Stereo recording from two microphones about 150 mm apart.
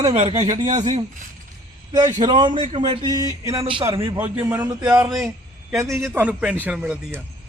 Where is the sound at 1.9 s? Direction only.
25° right (ahead or behind).